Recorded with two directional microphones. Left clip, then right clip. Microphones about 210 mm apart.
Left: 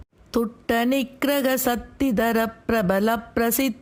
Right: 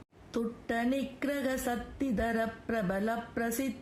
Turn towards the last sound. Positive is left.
turn(degrees=35)  # may be behind; listen again after turning